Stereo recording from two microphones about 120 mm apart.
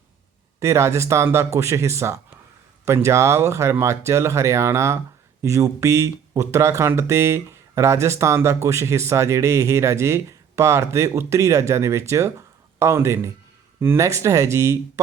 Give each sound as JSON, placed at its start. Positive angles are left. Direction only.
{"t": 0.6, "sound": "speech", "side_deg": -25}